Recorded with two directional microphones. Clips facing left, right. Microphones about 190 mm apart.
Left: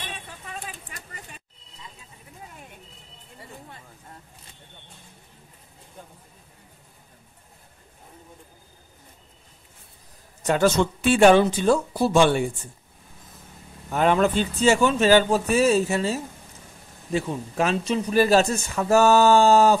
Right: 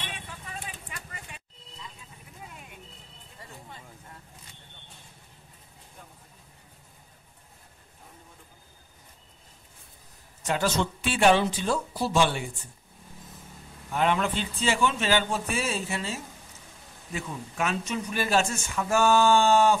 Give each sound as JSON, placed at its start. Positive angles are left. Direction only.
{"t": 0.7, "sound": "a sound", "side_deg": 40}
{"t": 10.4, "sound": "speech", "side_deg": 50}
{"t": 13.9, "sound": "speech", "side_deg": 45}